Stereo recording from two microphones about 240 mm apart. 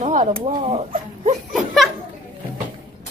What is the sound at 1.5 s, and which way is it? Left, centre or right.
Laughter, centre.